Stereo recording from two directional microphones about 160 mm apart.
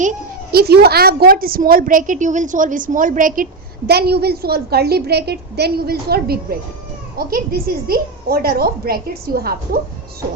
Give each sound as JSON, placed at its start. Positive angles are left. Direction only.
{"t": 0.5, "sound": "a woman's voice", "side_deg": -80}